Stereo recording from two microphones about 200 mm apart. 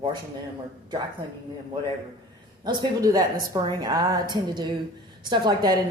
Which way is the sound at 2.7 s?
20° right (ahead or behind).